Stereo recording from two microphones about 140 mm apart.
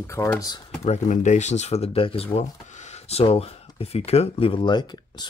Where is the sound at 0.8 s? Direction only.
55° left (ahead or behind).